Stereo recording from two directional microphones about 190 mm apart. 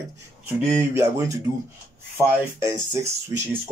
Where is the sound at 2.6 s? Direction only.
15° right (ahead or behind).